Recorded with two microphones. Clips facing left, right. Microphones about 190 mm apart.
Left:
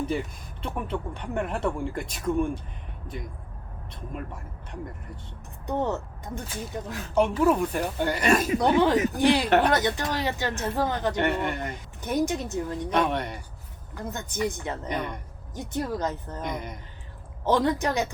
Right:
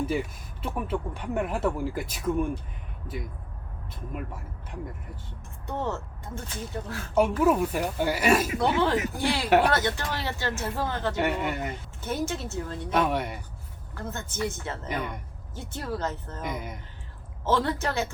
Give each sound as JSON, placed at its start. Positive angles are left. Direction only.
{"t": 0.0, "sound": "speech", "side_deg": -5}
{"t": 5.6, "sound": "speech", "side_deg": 15}
{"t": 7.1, "sound": "speech", "side_deg": -5}
{"t": 8.4, "sound": "speech", "side_deg": 15}
{"t": 9.5, "sound": "speech", "side_deg": -10}
{"t": 9.7, "sound": "speech", "side_deg": 15}
{"t": 11.1, "sound": "speech", "side_deg": -5}
{"t": 12.0, "sound": "speech", "side_deg": 15}
{"t": 12.9, "sound": "speech", "side_deg": -5}
{"t": 13.9, "sound": "speech", "side_deg": 15}
{"t": 16.4, "sound": "speech", "side_deg": -5}
{"t": 17.4, "sound": "speech", "side_deg": 15}